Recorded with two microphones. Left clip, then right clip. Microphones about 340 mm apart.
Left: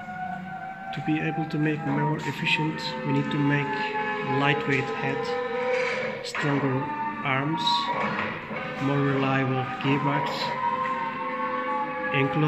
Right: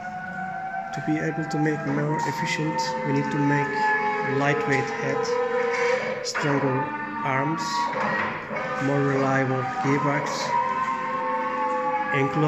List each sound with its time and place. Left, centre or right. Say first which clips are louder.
1.1 s speech: right 1 dB; centre
3.1 s speech: left 2 dB; centre
7.2 s speech: even; centre
9.2 s speech: right 3 dB; centre
12.1 s speech: right 2 dB; centre